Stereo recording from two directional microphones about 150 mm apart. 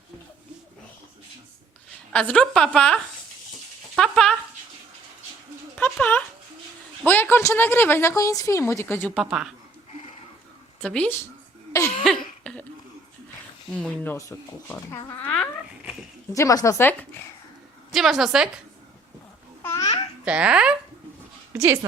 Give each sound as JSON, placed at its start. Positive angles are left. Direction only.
{"t": 2.1, "sound": "a woman's voice", "side_deg": 5}
{"t": 3.9, "sound": "a sound", "side_deg": 0}
{"t": 5.7, "sound": "a woman's voice", "side_deg": 10}
{"t": 9.1, "sound": "a woman's voice", "side_deg": -5}
{"t": 10.8, "sound": "speech", "side_deg": 10}
{"t": 12.0, "sound": "cough", "side_deg": 5}
{"t": 13.7, "sound": "a woman's voice", "side_deg": 10}
{"t": 16.3, "sound": "speech", "side_deg": 20}
{"t": 17.9, "sound": "a woman's voice", "side_deg": 0}
{"t": 19.6, "sound": "babbling", "side_deg": 20}
{"t": 20.2, "sound": "a woman's voice", "side_deg": -5}